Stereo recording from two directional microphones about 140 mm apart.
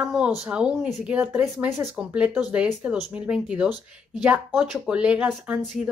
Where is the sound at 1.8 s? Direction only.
10° right (ahead or behind).